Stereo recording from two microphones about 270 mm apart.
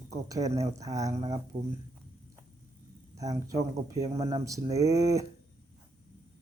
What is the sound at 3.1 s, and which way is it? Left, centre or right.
Speech, centre.